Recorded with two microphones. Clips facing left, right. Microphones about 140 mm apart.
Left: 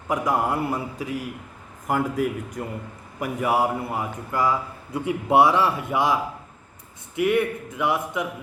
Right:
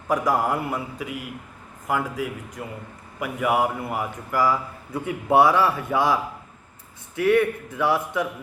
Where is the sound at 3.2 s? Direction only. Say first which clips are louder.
Even; 30° left (ahead or behind).